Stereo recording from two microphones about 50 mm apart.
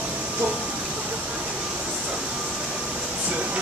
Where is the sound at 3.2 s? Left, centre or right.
Right.